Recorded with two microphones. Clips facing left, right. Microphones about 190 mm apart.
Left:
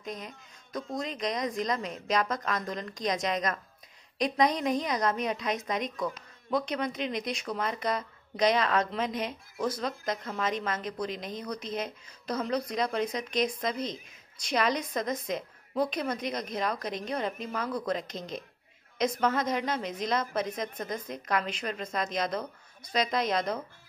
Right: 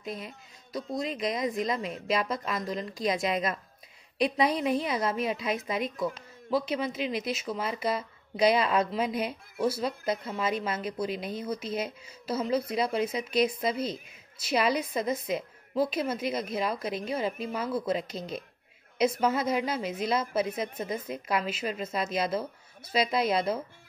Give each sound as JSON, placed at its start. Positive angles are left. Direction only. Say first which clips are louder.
{"t": 1.1, "sound": "speech", "louder": "right 1 dB", "side_deg": -5}
{"t": 2.0, "sound": "a woman's voice", "louder": "even", "side_deg": 40}
{"t": 2.4, "sound": "speech", "louder": "right 1 dB", "side_deg": -5}